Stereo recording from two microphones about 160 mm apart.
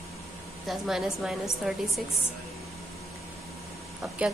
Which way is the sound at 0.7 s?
Centre (ahead or behind).